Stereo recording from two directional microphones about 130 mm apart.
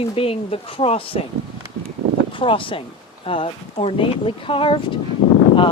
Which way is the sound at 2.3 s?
40° left (ahead or behind).